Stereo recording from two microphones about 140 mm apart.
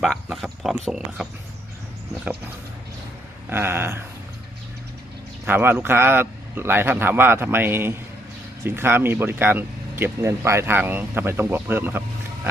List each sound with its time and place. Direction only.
0.0 s speech: centre (ahead or behind)
3.5 s speech: 15° right (ahead or behind)
5.5 s speech: 15° right (ahead or behind)